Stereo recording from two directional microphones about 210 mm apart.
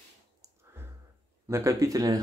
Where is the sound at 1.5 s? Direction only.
15° right (ahead or behind).